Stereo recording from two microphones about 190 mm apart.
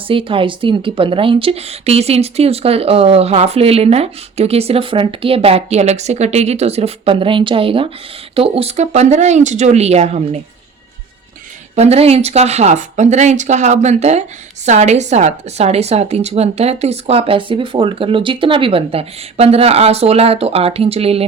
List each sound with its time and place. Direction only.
0.1 s speech: 30° right (ahead or behind)
11.7 s speech: 35° right (ahead or behind)